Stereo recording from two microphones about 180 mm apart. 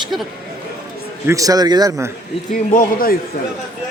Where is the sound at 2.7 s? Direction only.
50° left (ahead or behind).